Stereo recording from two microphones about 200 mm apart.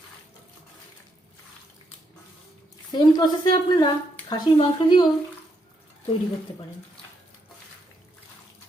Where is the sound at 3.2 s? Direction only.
20° left (ahead or behind).